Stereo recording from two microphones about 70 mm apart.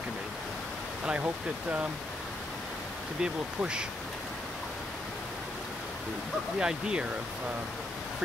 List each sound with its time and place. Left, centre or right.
1.0 s speech: centre
3.2 s speech: centre
6.6 s speech: centre